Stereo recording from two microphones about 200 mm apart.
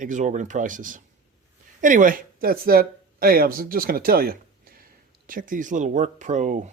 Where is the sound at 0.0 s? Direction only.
40° right (ahead or behind).